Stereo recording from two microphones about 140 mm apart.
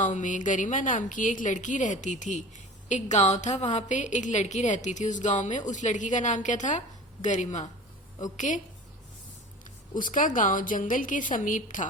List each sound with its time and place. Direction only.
0.0 s a woman's voice: 60° left (ahead or behind)
9.9 s a woman's voice: 70° left (ahead or behind)